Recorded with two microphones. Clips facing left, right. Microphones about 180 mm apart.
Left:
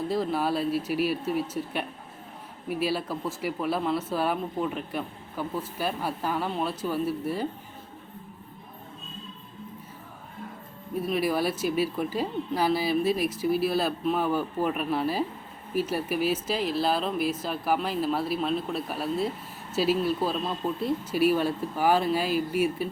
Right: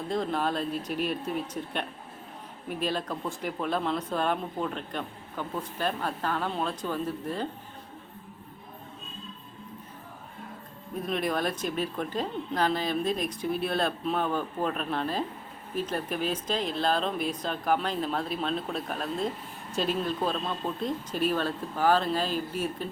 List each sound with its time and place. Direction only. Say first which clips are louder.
0.1 s speech: even; 5° left (ahead or behind)
11.0 s speech: left 3 dB; 5° left (ahead or behind)